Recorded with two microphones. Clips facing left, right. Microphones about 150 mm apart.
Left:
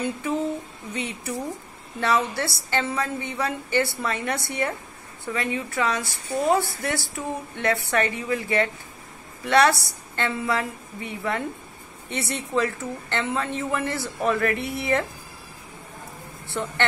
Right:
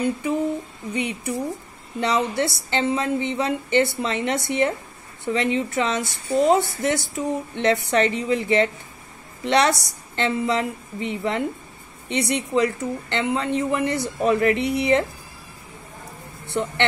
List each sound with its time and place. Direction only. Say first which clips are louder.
0.0 s a woman's voice: right 3 dB; 15° right (ahead or behind)
16.4 s speech: right 4 dB; 20° right (ahead or behind)